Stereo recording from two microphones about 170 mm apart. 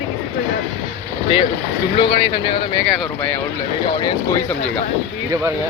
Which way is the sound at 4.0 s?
15° left (ahead or behind).